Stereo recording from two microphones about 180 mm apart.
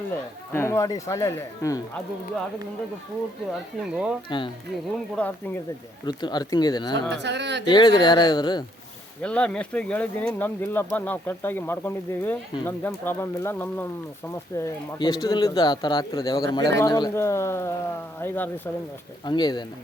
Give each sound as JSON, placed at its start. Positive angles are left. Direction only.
{"t": 0.5, "sound": "speech", "side_deg": 15}
{"t": 3.8, "sound": "speech", "side_deg": -5}
{"t": 4.3, "sound": "speech", "side_deg": 25}
{"t": 5.1, "sound": "speech", "side_deg": 10}
{"t": 6.1, "sound": "speech", "side_deg": 20}
{"t": 7.1, "sound": "speech", "side_deg": -75}
{"t": 7.7, "sound": "speech", "side_deg": 25}
{"t": 9.2, "sound": "speech", "side_deg": 5}
{"t": 19.2, "sound": "speech", "side_deg": 25}